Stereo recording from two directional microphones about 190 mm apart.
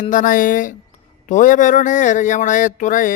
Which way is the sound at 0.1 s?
45° left (ahead or behind).